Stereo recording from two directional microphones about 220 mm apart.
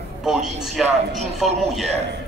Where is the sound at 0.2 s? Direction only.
Centre (ahead or behind).